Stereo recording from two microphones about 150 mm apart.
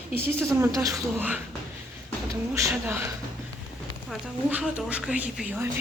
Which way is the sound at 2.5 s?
20° right (ahead or behind).